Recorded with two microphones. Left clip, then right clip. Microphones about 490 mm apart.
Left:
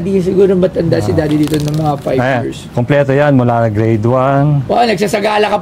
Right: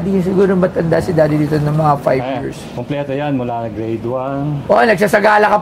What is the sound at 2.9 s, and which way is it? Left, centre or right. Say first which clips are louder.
Speech: left 9 dB; left.